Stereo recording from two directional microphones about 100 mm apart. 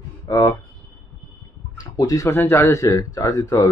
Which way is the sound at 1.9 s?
35° left (ahead or behind).